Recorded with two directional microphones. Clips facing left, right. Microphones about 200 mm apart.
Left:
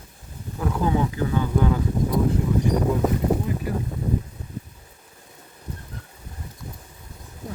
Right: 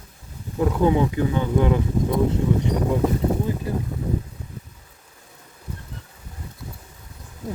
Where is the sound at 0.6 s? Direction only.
20° right (ahead or behind).